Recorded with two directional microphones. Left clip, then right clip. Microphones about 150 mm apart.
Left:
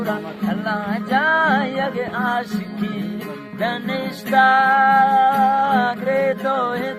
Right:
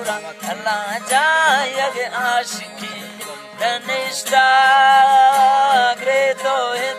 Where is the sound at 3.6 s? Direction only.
15° right (ahead or behind).